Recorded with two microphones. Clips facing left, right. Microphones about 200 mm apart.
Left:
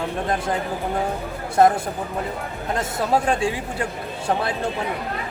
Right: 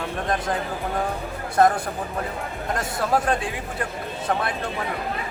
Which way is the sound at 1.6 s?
25° left (ahead or behind).